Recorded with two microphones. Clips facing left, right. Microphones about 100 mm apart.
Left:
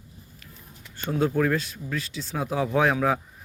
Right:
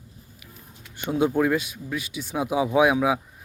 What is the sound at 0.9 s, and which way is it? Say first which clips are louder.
Speech: right 2 dB; 15° right (ahead or behind).